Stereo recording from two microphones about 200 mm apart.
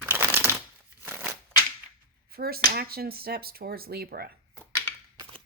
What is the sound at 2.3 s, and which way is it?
Speech, 50° right (ahead or behind).